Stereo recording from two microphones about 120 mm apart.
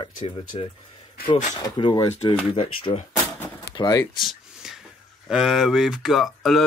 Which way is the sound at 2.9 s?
50° left (ahead or behind).